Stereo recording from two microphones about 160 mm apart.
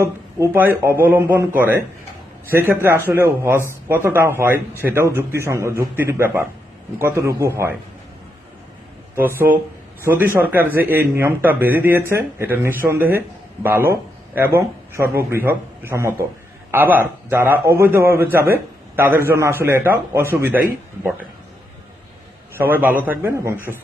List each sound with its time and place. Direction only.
0.0 s a man's voice: 20° right (ahead or behind)
9.1 s a man's voice: 15° right (ahead or behind)
22.5 s a man's voice: 10° right (ahead or behind)